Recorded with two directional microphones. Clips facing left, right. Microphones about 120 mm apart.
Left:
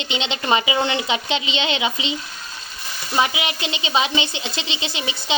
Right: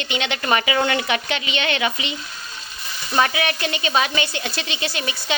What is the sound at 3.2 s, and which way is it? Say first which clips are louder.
A woman's voice: right 1 dB; 15° left (ahead or behind).